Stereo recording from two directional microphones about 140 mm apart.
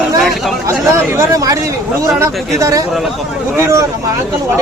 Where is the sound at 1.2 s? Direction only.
25° right (ahead or behind).